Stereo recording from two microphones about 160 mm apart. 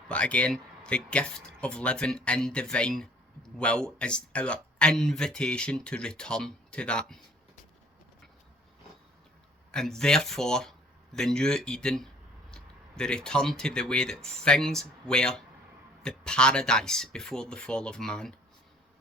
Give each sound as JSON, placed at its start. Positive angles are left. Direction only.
{"t": 0.1, "sound": "speech", "side_deg": 10}
{"t": 9.7, "sound": "speech", "side_deg": 5}